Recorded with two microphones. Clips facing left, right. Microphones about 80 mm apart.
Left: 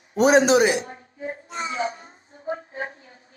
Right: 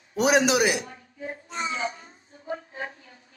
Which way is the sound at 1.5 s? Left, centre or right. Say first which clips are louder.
Left 2 dB; left.